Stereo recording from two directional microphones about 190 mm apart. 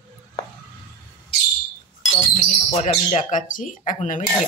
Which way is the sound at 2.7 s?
35° left (ahead or behind).